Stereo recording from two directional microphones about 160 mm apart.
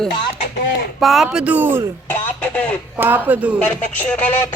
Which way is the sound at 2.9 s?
10° right (ahead or behind).